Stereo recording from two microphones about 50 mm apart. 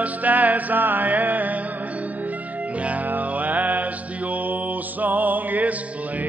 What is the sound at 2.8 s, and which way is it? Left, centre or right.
Music, right.